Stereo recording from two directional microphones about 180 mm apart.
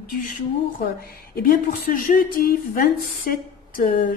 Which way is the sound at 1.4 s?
50° left (ahead or behind).